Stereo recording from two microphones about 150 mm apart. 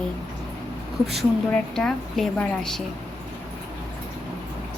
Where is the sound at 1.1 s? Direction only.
Centre (ahead or behind).